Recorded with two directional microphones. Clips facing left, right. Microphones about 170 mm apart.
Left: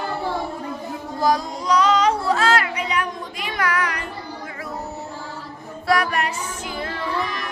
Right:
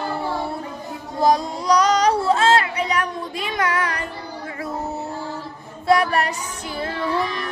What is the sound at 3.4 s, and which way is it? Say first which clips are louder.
Child singing: even; 25° right (ahead or behind).